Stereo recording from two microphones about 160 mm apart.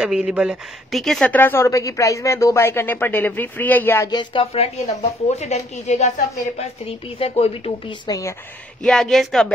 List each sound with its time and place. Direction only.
0.0 s speech: 5° right (ahead or behind); by 4.1 s 15° left (ahead or behind)
4.1 s speech: 30° left (ahead or behind)
8.1 s a woman's voice: 20° left (ahead or behind)
8.8 s speech: centre (ahead or behind)